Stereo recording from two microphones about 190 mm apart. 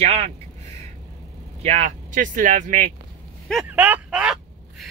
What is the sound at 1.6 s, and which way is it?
Speech, 40° right (ahead or behind).